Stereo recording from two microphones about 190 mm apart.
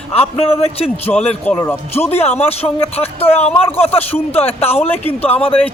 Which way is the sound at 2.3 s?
35° left (ahead or behind).